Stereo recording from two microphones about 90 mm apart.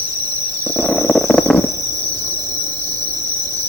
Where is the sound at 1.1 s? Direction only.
10° left (ahead or behind).